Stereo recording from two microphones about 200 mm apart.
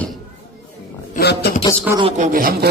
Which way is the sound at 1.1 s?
55° left (ahead or behind).